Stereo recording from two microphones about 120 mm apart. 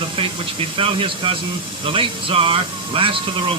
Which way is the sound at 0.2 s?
50° right (ahead or behind).